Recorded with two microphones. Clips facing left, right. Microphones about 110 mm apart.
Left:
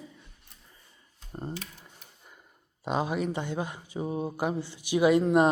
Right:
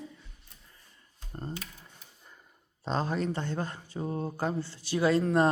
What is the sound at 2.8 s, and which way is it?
Speech, 10° left (ahead or behind).